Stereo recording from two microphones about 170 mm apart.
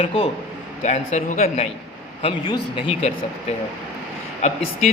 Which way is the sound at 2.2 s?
30° left (ahead or behind).